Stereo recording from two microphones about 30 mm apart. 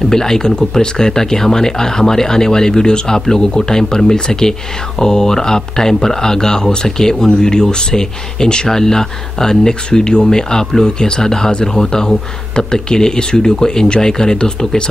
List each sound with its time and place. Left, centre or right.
0.1 s speech: centre
9.8 s speech: left